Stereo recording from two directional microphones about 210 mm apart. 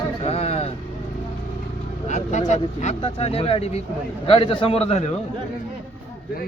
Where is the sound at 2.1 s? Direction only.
35° left (ahead or behind).